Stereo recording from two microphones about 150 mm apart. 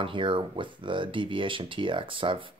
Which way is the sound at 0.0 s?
35° right (ahead or behind).